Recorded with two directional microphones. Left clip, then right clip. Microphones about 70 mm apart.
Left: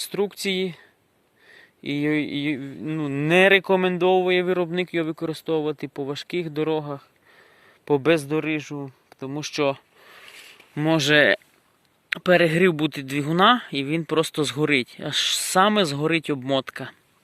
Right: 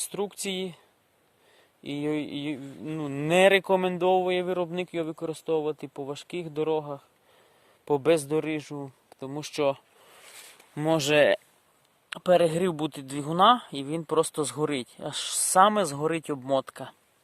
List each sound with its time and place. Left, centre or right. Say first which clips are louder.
0.0 s speech: left 7 dB; centre
2.9 s speech: left 4 dB; centre
4.4 s speech: left 6 dB; centre
7.9 s speech: left 4 dB; centre
8.3 s speech: left 3 dB; right
8.9 s a sound: left 4 dB; right
9.3 s speech: left 4 dB; right
9.6 s a sound: left 2 dB; centre
10.8 s speech: left 4 dB; right
12.0 s speech: left 3 dB; centre